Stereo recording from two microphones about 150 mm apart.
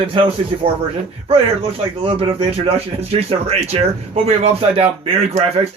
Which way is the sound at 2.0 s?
40° right (ahead or behind).